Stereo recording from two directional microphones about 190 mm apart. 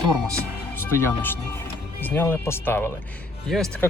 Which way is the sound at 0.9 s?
15° left (ahead or behind).